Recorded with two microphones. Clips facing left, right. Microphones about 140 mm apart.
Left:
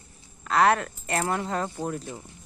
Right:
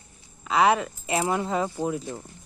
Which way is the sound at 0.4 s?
Centre (ahead or behind).